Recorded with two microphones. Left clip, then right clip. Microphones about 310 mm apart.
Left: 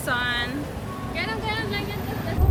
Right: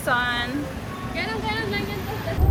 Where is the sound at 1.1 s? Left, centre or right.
Centre.